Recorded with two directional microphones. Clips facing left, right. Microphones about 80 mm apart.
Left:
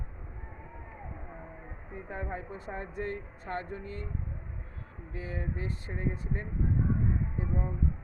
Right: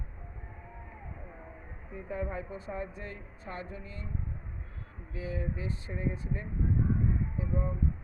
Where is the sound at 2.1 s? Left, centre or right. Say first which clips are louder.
Right 2 dB; left.